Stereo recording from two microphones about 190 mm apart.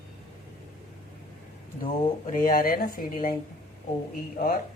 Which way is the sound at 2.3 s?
45° left (ahead or behind).